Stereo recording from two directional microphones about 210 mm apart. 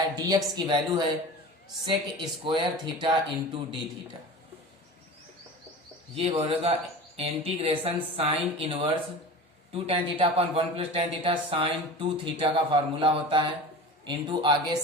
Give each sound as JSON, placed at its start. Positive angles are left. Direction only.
{"t": 0.2, "sound": "speech", "side_deg": -20}
{"t": 6.1, "sound": "speech", "side_deg": -30}